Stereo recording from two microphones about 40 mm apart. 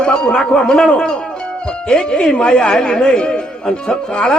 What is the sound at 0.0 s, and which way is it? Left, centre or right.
A man's voice, left.